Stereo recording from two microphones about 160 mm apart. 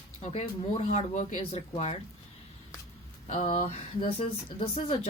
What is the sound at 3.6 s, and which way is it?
Speech, 35° left (ahead or behind).